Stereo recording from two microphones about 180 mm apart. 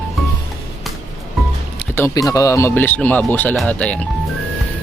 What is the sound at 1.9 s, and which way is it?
Speech, 15° left (ahead or behind).